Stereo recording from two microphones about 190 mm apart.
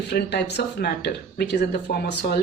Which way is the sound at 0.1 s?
60° left (ahead or behind).